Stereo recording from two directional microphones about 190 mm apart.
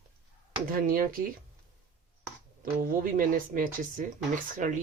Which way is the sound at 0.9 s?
50° right (ahead or behind).